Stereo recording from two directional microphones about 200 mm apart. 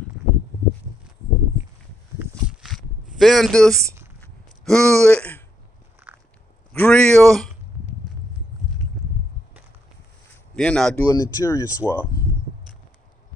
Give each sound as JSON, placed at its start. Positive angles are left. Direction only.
{"t": 2.1, "sound": "a sound", "side_deg": -5}
{"t": 4.6, "sound": "speech", "side_deg": 5}
{"t": 6.1, "sound": "biting", "side_deg": -10}
{"t": 6.7, "sound": "a sound", "side_deg": 5}
{"t": 10.5, "sound": "speech", "side_deg": 5}
{"t": 11.1, "sound": "speech", "side_deg": 15}